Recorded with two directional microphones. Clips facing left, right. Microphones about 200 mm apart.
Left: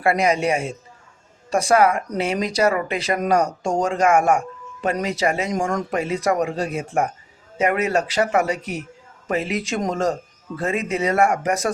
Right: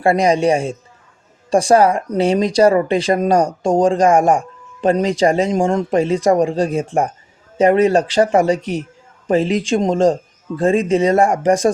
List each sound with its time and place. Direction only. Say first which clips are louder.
0.0 s speech: right 5 dB; 30° right (ahead or behind)